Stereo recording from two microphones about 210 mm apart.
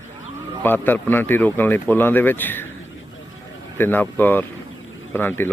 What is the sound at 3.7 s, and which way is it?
Speech, 10° left (ahead or behind).